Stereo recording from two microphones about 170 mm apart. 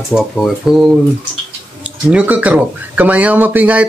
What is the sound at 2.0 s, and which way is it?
Speech, 10° right (ahead or behind).